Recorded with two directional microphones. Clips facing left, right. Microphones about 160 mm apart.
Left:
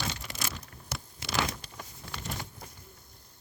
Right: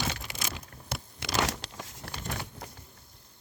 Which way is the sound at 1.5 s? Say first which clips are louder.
Right 3 dB; 90° right.